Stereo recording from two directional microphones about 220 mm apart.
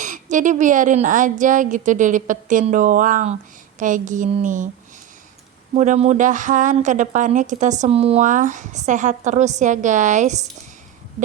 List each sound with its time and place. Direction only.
0.0 s speech: 35° right (ahead or behind)
5.7 s speech: 30° right (ahead or behind)